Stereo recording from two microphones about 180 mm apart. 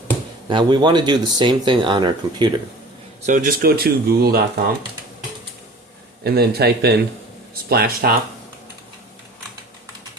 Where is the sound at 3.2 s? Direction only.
45° right (ahead or behind).